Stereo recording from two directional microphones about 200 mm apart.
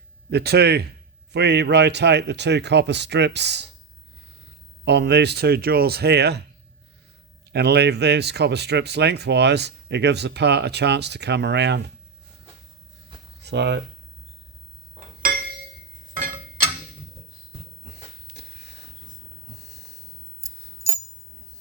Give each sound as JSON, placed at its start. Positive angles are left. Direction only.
{"t": 0.3, "sound": "speech", "side_deg": -55}
{"t": 4.9, "sound": "speech", "side_deg": -60}
{"t": 7.5, "sound": "speech", "side_deg": -55}
{"t": 13.4, "sound": "speech", "side_deg": -60}
{"t": 17.8, "sound": "a sound", "side_deg": -60}